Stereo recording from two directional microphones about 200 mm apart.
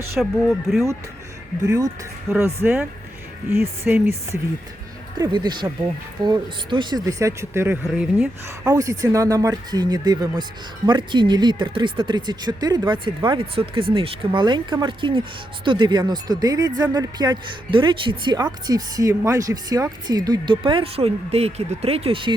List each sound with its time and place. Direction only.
0.2 s speech: centre (ahead or behind)
1.6 s speech: 15° right (ahead or behind)
5.1 s speech: 20° right (ahead or behind)